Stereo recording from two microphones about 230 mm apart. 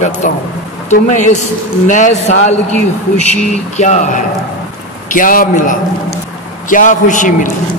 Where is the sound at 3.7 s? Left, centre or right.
Left.